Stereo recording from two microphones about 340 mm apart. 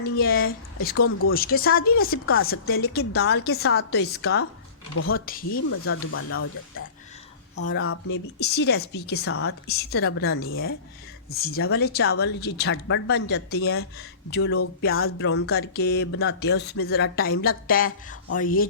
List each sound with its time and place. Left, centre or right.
0.2 s speech: left
0.9 s a woman's voice: left
1.3 s speech: left
2.2 s a woman's voice: left
5.2 s speech: left
5.6 s a woman's voice: left